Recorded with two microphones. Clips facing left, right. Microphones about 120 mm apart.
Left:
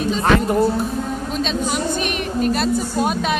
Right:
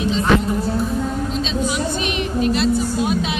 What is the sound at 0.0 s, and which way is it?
Music, 45° left (ahead or behind).